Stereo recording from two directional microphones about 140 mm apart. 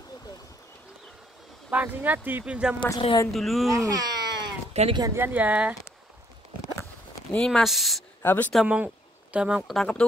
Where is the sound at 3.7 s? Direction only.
25° right (ahead or behind).